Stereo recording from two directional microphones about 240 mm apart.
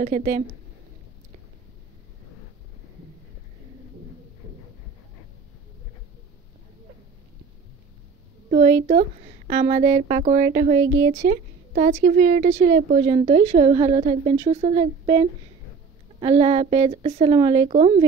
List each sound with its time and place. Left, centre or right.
0.0 s speech: right
8.5 s speech: right